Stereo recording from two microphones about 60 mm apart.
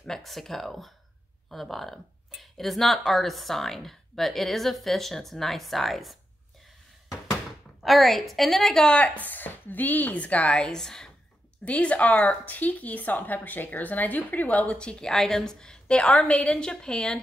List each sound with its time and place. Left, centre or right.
0.0 s speech: centre
7.8 s speech: centre
8.8 s a woman's voice: centre
9.3 s a woman's voice: left; by 11.1 s centre
11.6 s a woman's voice: left
14.8 s a woman's voice: centre